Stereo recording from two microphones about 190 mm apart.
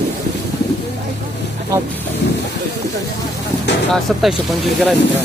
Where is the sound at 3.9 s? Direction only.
Centre (ahead or behind).